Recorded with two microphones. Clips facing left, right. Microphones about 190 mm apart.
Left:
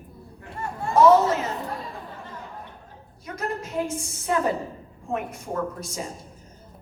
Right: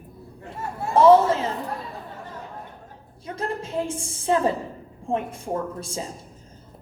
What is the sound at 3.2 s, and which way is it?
A woman's voice, 30° right (ahead or behind).